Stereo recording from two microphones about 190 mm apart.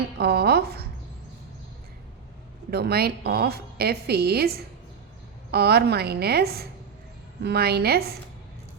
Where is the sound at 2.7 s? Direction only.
55° right (ahead or behind).